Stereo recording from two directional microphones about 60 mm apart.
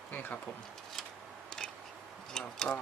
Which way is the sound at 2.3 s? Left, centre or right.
Centre.